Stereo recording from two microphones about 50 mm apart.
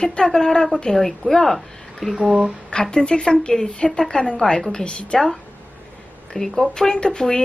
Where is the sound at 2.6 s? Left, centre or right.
Centre.